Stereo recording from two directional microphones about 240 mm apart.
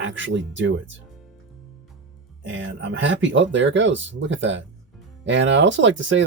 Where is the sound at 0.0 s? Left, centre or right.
Right.